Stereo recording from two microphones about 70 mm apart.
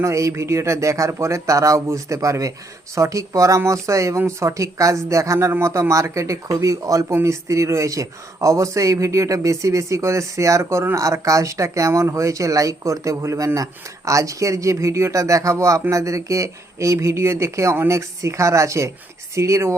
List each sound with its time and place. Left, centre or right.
0.0 s speech: right